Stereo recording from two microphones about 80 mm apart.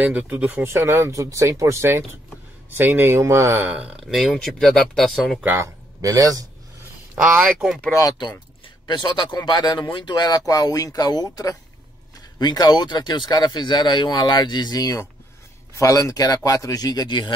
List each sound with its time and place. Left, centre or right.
0.0 s speech: right
0.7 s speech: right
3.6 s speech: centre
4.1 s speech: centre
5.6 s speech: right
7.4 s speech: centre
7.9 s a man's voice: left
8.8 s speech: left
10.4 s a man's voice: left
12.4 s speech: left
15.7 s a man's voice: left